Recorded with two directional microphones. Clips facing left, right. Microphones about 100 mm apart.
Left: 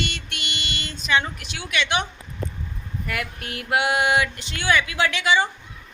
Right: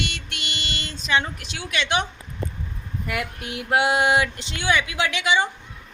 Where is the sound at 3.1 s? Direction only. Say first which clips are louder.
Right 2 dB; 20° right (ahead or behind).